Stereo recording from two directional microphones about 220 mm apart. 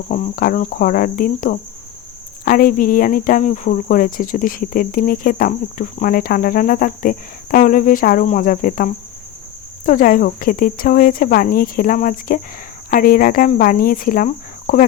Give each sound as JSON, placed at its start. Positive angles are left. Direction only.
{"t": 0.1, "sound": "cricket", "side_deg": 40}